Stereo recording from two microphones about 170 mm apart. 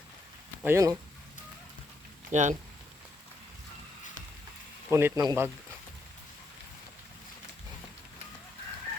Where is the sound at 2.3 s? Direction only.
45° right (ahead or behind).